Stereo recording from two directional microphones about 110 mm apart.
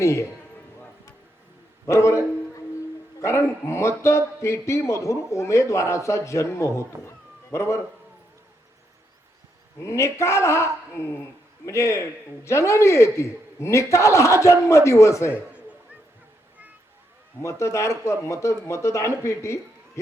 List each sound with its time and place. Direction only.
0.0 s a man's voice: 25° left (ahead or behind)
1.9 s a man's voice: 25° left (ahead or behind)
9.8 s a man's voice: 25° left (ahead or behind)
17.4 s a man's voice: 25° left (ahead or behind)